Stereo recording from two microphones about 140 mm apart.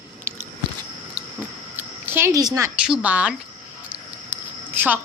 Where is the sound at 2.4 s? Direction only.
20° right (ahead or behind).